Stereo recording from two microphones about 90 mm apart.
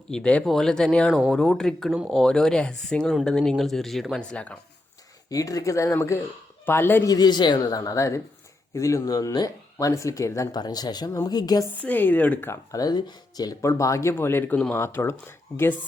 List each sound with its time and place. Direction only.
0.1 s speech: 10° left (ahead or behind)
5.3 s speech: 40° left (ahead or behind); by 7.0 s 25° left (ahead or behind)
7.0 s speech: 45° left (ahead or behind)
7.7 s speech: 40° left (ahead or behind)
10.5 s speech: 50° left (ahead or behind)
11.7 s speech: 20° left (ahead or behind)
12.5 s speech: 45° left (ahead or behind); by 15.1 s 25° left (ahead or behind)